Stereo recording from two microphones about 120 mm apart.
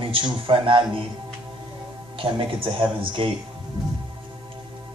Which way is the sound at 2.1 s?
45° right (ahead or behind).